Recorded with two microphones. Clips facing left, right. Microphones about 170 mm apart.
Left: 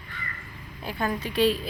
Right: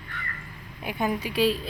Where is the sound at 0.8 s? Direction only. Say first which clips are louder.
Right 1 dB; 15° right (ahead or behind).